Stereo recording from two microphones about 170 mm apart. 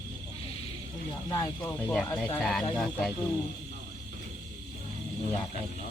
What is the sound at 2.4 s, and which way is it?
Speech, centre (ahead or behind).